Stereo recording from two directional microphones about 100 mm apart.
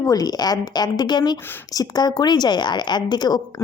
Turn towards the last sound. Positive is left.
turn(degrees=45)  # may be behind; listen again after turning